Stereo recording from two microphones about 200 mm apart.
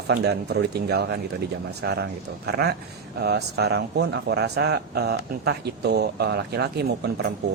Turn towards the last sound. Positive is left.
turn(degrees=-55)  # may be behind; listen again after turning